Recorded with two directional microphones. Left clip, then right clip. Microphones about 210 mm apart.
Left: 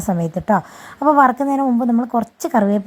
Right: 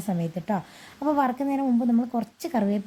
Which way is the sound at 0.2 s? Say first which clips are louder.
Left 12 dB; 15° left (ahead or behind).